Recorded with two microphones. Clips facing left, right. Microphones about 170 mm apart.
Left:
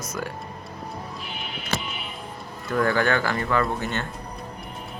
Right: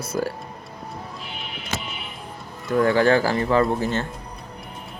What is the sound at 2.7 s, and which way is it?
A man's voice, 20° right (ahead or behind).